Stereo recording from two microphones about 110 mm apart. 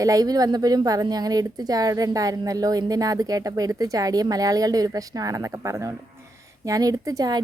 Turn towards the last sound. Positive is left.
turn(degrees=-35)  # may be behind; listen again after turning